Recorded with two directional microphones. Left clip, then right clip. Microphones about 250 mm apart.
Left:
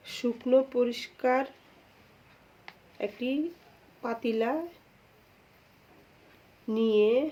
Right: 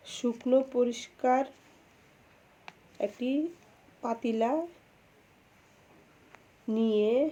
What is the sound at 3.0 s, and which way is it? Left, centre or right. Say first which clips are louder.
Speech: even; centre.